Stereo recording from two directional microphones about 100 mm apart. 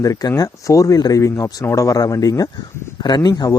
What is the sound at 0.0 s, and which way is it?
Speech, 35° left (ahead or behind).